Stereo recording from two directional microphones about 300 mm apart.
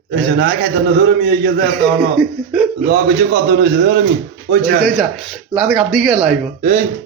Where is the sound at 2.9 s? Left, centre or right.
Right.